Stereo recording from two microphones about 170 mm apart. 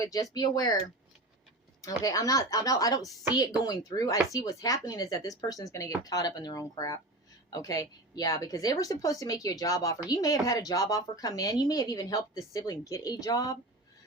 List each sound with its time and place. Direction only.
0.0 s speech: 20° left (ahead or behind)
2.0 s speech: 20° left (ahead or behind)